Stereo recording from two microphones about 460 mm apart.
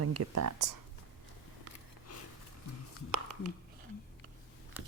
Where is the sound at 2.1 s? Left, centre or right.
Left.